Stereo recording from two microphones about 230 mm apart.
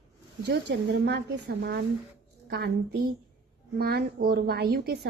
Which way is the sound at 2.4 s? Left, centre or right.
Right.